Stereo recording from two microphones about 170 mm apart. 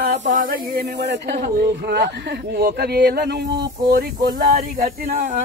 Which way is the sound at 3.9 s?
55° right (ahead or behind).